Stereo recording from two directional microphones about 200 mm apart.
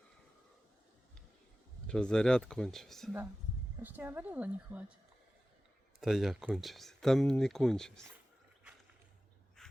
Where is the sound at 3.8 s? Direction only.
10° right (ahead or behind).